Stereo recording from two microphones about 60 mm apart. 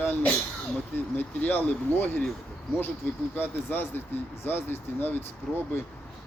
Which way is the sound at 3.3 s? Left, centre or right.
Left.